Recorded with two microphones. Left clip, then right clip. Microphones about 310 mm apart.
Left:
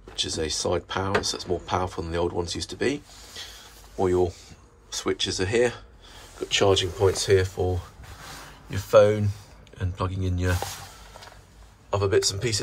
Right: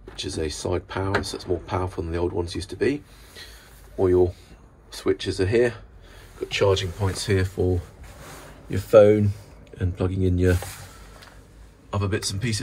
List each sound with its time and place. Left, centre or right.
0.1 s speech: centre
8.6 s speech: centre
11.9 s speech: centre